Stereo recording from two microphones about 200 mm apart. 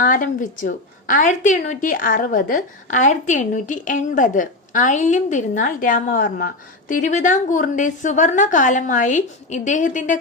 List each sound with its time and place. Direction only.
0.0 s a woman's voice: 40° left (ahead or behind)